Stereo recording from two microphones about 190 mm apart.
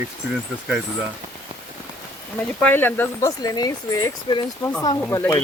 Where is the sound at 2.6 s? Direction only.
10° left (ahead or behind).